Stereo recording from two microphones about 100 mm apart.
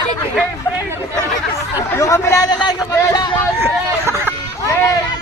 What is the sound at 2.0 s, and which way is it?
Chatter, 30° left (ahead or behind).